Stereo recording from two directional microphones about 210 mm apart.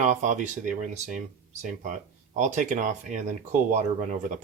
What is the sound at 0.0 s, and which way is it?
Speech, 35° right (ahead or behind).